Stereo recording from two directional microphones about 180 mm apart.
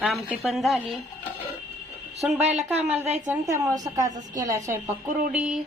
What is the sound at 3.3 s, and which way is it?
A woman's voice, 15° right (ahead or behind).